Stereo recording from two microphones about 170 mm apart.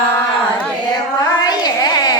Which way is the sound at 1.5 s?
25° left (ahead or behind).